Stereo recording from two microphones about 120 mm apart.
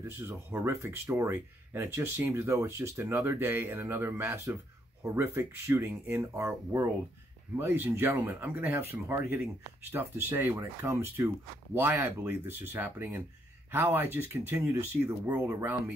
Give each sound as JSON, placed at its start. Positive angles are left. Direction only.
{"t": 0.0, "sound": "speech", "side_deg": -20}